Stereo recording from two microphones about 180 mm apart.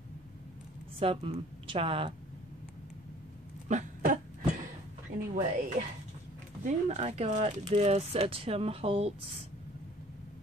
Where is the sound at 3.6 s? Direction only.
45° right (ahead or behind).